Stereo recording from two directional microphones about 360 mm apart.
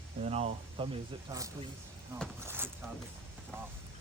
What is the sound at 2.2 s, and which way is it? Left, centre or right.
Speech, centre.